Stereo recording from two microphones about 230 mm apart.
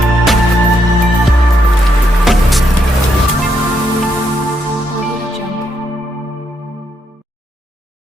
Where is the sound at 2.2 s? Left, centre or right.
Centre.